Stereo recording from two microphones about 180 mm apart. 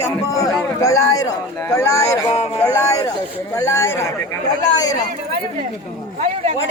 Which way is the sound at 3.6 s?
15° left (ahead or behind).